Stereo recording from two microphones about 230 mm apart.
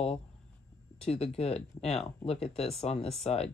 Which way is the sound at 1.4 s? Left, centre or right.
Left.